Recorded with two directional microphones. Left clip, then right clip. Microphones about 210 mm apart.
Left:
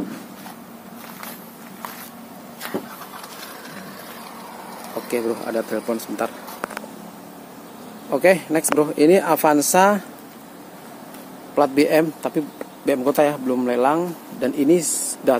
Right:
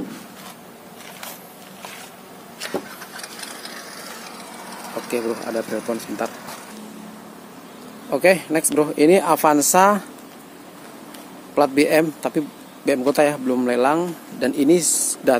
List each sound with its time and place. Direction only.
5.1 s a man's voice: 10° right (ahead or behind)
8.1 s a man's voice: 5° right (ahead or behind)
11.5 s a man's voice: 10° right (ahead or behind)